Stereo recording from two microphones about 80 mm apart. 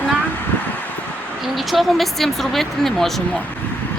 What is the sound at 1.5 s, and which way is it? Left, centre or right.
Speech, centre.